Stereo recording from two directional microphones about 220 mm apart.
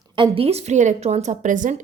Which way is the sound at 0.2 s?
25° right (ahead or behind).